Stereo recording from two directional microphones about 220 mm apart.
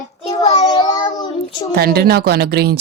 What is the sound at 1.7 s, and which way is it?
Speech, 45° right (ahead or behind).